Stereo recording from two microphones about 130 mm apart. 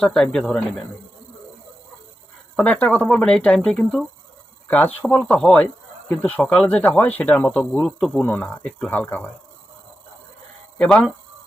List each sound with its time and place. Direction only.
0.0 s speech: 5° left (ahead or behind)
2.6 s speech: 10° left (ahead or behind)
10.8 s speech: 5° left (ahead or behind)